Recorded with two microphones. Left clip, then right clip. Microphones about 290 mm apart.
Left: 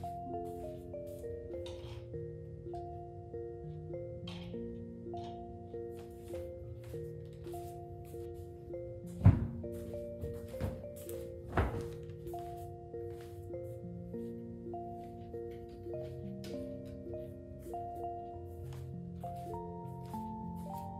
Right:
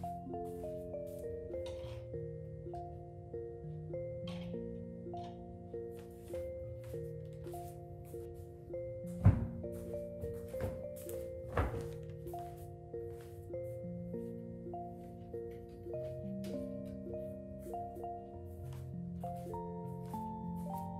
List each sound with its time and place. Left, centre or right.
0.0 s music: centre
3.9 s music: centre
6.3 s music: centre
9.0 s music: centre
14.1 s music: centre
19.2 s music: centre